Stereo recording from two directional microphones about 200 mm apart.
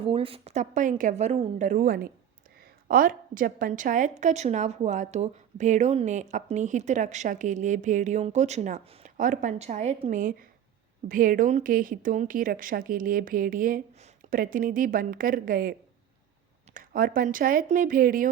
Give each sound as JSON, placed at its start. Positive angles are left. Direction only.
{"t": 0.0, "sound": "speech", "side_deg": -25}
{"t": 16.7, "sound": "speech", "side_deg": -45}